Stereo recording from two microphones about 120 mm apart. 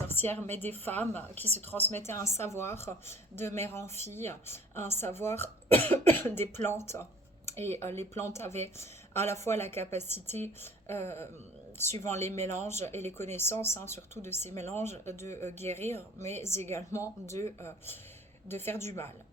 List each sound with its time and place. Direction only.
0.1 s a woman's voice: 15° left (ahead or behind)